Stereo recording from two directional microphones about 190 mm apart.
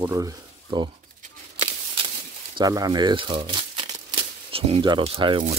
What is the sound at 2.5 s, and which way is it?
Speech, 20° right (ahead or behind).